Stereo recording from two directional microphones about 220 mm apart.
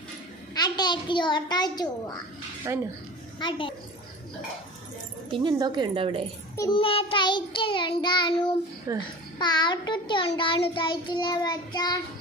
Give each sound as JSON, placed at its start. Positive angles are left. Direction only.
{"t": 0.5, "sound": "a child's voice", "side_deg": 20}
{"t": 3.3, "sound": "child singing", "side_deg": 20}
{"t": 5.3, "sound": "speech", "side_deg": -20}
{"t": 6.6, "sound": "child singing", "side_deg": 20}
{"t": 8.9, "sound": "a child's voice", "side_deg": -15}
{"t": 9.4, "sound": "child singing", "side_deg": 20}